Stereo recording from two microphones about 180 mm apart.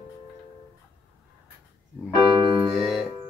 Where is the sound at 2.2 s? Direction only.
30° right (ahead or behind).